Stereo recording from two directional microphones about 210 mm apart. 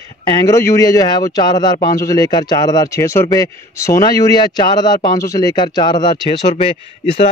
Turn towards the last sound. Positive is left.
turn(degrees=30)  # may be behind; listen again after turning